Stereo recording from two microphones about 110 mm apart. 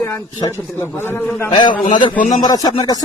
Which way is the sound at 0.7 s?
20° left (ahead or behind).